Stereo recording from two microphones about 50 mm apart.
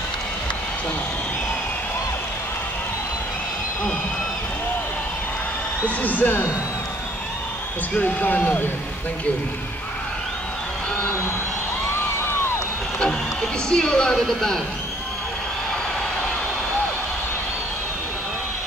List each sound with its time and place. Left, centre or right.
5.9 s speech: left
8.0 s speech: left
13.0 s speech: centre
14.1 s a man's voice: centre